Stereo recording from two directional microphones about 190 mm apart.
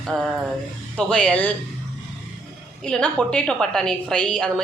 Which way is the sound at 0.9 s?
5° left (ahead or behind).